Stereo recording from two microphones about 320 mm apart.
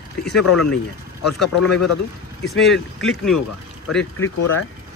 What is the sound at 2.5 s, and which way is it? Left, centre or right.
Speech, centre.